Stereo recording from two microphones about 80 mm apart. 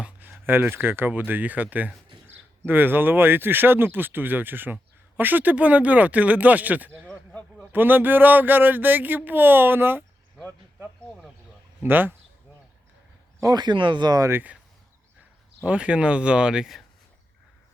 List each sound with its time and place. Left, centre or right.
0.0 s speech: right
7.0 s a sound: centre
7.7 s speech: right
11.8 s speech: right
13.4 s speech: right
15.6 s speech: centre